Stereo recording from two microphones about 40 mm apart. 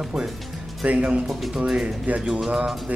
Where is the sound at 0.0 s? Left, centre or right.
Centre.